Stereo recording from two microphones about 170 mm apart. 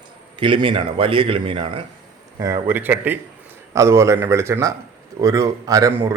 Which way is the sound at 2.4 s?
15° right (ahead or behind).